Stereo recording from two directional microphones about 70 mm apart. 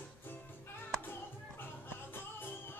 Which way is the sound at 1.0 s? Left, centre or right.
Left.